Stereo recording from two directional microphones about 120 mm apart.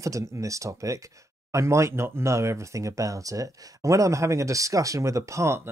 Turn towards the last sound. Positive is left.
turn(degrees=-25)  # may be behind; listen again after turning